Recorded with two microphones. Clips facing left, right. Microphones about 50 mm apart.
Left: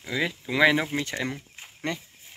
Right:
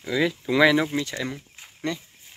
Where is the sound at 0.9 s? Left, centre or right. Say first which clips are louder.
Right 1 dB; left.